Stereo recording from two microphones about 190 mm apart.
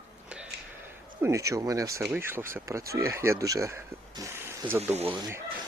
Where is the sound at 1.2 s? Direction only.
15° right (ahead or behind).